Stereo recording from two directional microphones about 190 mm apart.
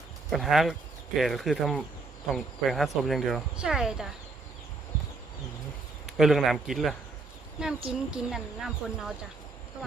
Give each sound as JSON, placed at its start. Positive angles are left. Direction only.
{"t": 0.3, "sound": "speech", "side_deg": 0}
{"t": 6.1, "sound": "speech", "side_deg": 0}